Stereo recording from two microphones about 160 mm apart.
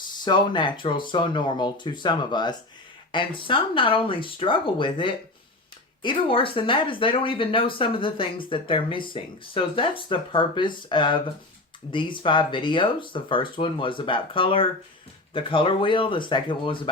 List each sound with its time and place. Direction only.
0.3 s speech: 30° left (ahead or behind)